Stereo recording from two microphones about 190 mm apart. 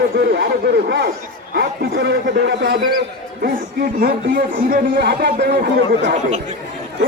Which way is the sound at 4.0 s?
55° right (ahead or behind).